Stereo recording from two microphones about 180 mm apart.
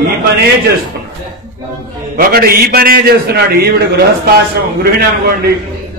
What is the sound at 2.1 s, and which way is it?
A man's voice, 55° right (ahead or behind).